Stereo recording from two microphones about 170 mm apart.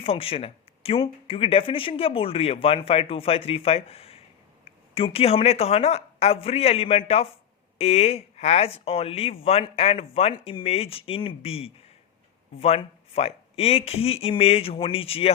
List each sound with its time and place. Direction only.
0.0 s speech: 35° left (ahead or behind)